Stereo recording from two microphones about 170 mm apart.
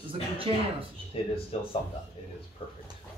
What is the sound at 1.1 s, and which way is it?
Speech, 35° left (ahead or behind).